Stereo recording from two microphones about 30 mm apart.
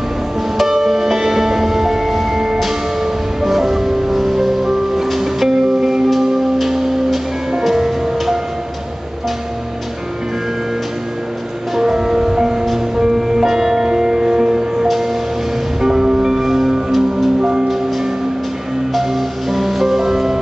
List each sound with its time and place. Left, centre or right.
0.6 s music: centre
6.6 s music: centre
11.7 s music: centre
16.3 s music: centre
17.4 s music: right
18.9 s music: centre